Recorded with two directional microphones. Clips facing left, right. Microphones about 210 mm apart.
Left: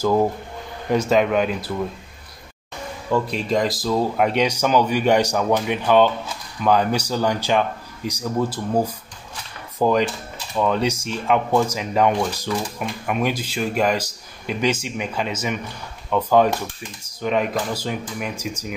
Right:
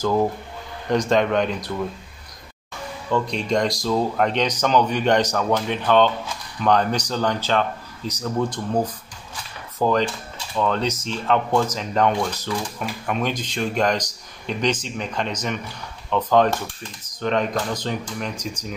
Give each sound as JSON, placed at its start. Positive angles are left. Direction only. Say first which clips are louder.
{"t": 0.0, "sound": "speech", "louder": "left 2 dB", "side_deg": 10}
{"t": 3.1, "sound": "speech", "louder": "left 1 dB", "side_deg": 5}